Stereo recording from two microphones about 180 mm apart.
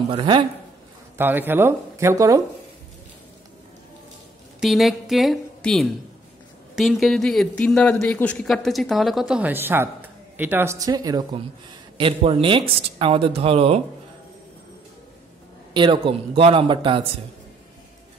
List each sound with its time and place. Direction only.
0.1 s a man's voice: 25° right (ahead or behind)
1.1 s speech: 10° right (ahead or behind)
4.6 s a woman's voice: centre (ahead or behind); by 13.7 s 35° right (ahead or behind)
15.7 s a man's voice: 25° right (ahead or behind)